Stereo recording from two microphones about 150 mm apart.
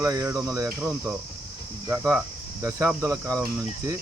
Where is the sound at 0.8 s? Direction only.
5° right (ahead or behind).